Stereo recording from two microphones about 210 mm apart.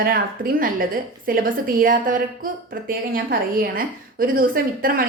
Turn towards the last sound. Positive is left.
turn(degrees=-45)  # may be behind; listen again after turning